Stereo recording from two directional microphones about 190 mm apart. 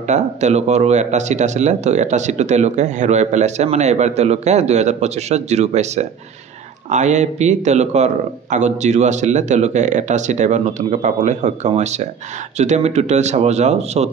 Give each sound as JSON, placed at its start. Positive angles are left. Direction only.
{"t": 0.0, "sound": "speech", "side_deg": -40}